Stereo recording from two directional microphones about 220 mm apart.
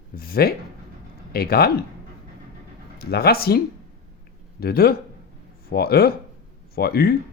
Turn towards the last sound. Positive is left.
turn(degrees=45)  # may be behind; listen again after turning